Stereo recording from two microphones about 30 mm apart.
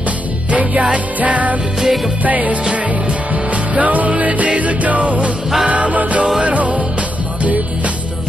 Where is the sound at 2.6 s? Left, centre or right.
Right.